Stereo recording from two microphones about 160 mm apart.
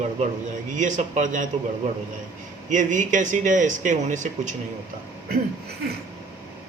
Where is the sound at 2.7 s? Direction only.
50° right (ahead or behind).